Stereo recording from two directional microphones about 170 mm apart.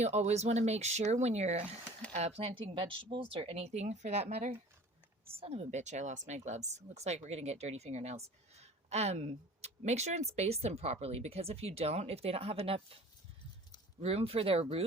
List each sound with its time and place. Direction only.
0.0 s a woman's voice: 40° right (ahead or behind)
14.0 s speech: 35° right (ahead or behind)